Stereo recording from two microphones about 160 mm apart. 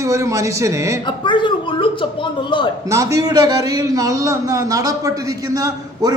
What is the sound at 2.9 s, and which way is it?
A man's voice, 20° right (ahead or behind).